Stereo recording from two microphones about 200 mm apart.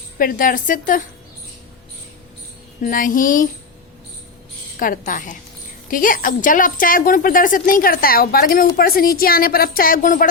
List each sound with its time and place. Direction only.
0.2 s a woman's voice: 45° left (ahead or behind)
2.8 s child singing: 40° left (ahead or behind)
4.8 s child singing: 45° left (ahead or behind)
5.9 s a woman's voice: 45° left (ahead or behind)